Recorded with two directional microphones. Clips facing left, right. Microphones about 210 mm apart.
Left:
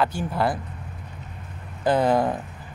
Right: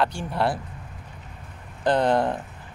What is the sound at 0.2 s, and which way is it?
Speech, centre (ahead or behind).